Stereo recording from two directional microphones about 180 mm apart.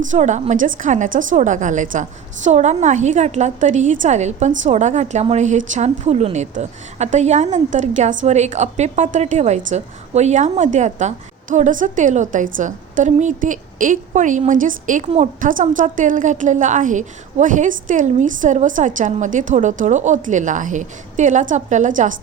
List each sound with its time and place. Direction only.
0.1 s a woman's voice: 40° right (ahead or behind)